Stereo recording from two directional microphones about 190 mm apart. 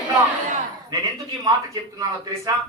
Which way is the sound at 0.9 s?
20° right (ahead or behind).